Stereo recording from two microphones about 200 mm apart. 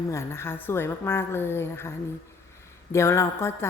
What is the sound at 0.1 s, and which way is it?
Speech, 15° left (ahead or behind).